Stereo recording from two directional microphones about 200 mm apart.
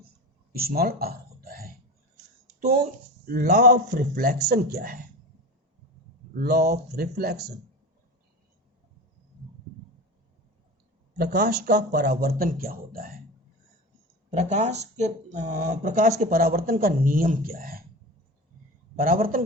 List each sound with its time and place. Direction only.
0.5 s a sound: 50° right (ahead or behind)
3.2 s speech: 45° right (ahead or behind)
6.4 s speech: 50° right (ahead or behind)
11.2 s speech: 55° right (ahead or behind)
14.3 s speech: 35° right (ahead or behind)
18.9 s speech: 45° right (ahead or behind)